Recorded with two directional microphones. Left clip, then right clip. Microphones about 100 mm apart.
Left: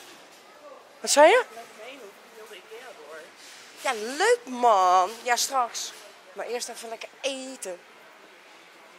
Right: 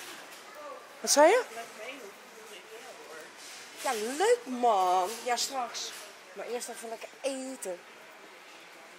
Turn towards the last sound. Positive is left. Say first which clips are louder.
# left 2 dB
turn(degrees=10)  # may be behind; listen again after turning